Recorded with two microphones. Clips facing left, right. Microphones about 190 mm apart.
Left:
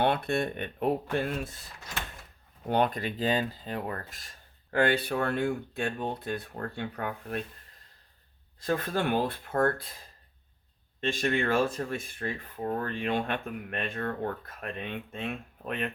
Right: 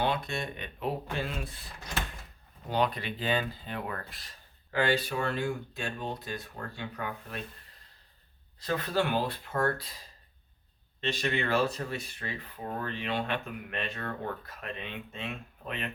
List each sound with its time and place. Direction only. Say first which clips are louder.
0.0 s speech: left 4 dB; 60° left (ahead or behind)
2.6 s speech: left 3 dB; 55° left (ahead or behind)
8.5 s speech: left 1 dB; 50° left (ahead or behind)
11.0 s speech: left 3 dB; 50° left (ahead or behind)